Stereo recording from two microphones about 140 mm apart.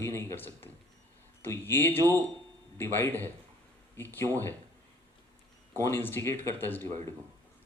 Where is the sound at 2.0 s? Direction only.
25° right (ahead or behind).